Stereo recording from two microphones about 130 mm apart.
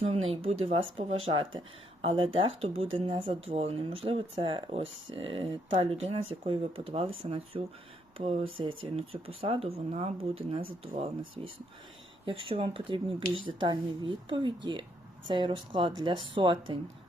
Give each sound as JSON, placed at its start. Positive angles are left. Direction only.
{"t": 0.0, "sound": "speech", "side_deg": -50}
{"t": 12.2, "sound": "speech", "side_deg": -40}